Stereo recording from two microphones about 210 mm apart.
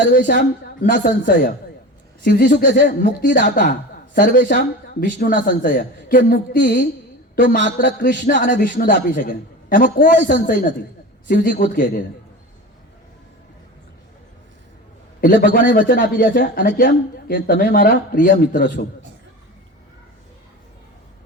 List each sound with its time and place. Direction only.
0.0 s a man's voice: 50° left (ahead or behind)
15.2 s speech: 45° left (ahead or behind)